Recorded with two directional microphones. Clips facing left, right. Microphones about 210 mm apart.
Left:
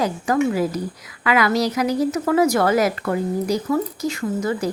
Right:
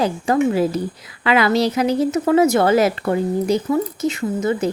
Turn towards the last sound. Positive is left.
turn(degrees=-25)  # may be behind; listen again after turning